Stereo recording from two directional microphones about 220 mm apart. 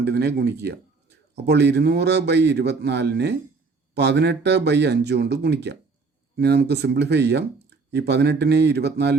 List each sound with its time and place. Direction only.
0.0 s a man's voice: 45° right (ahead or behind)